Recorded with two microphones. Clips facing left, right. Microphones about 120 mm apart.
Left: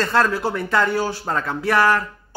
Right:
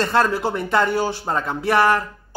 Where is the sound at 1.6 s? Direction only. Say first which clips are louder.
Right 1 dB; 25° right (ahead or behind).